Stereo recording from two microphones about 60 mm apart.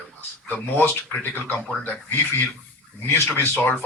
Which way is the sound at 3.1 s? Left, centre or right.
Left.